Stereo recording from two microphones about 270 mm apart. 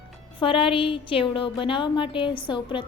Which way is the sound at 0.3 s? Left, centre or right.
Centre.